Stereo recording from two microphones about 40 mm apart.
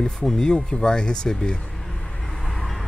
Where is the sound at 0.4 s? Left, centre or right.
Centre.